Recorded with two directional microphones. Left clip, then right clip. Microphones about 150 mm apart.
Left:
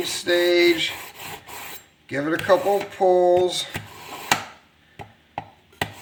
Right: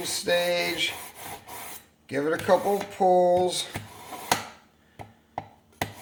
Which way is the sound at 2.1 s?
55° right (ahead or behind).